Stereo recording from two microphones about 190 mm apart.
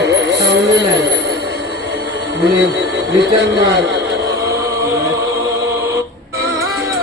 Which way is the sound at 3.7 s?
65° right (ahead or behind).